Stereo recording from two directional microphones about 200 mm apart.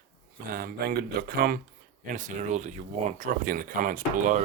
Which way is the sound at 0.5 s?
50° right (ahead or behind).